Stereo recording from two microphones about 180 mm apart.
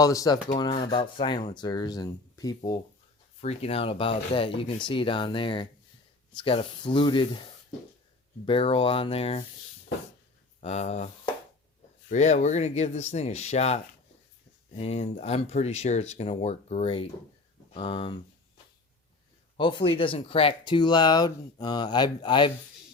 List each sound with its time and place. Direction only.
0.0 s speech: 20° left (ahead or behind)
3.4 s speech: 35° left (ahead or behind)
10.6 s speech: 35° left (ahead or behind)
14.8 s speech: 35° left (ahead or behind)
19.5 s speech: 25° left (ahead or behind)